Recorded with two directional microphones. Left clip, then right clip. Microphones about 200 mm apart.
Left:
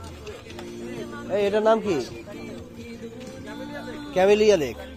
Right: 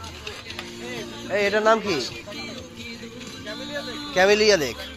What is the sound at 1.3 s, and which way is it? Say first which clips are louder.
Speech: right 1 dB; 25° left (ahead or behind).